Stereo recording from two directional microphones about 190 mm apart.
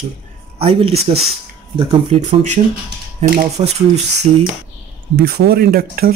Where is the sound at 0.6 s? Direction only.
30° right (ahead or behind).